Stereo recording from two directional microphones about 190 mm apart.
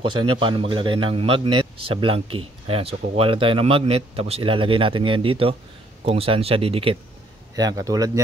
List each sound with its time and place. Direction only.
0.0 s a man's voice: 25° right (ahead or behind)
7.5 s a man's voice: 20° right (ahead or behind)